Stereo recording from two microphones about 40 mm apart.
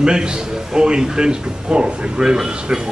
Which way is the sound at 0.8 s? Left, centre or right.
Right.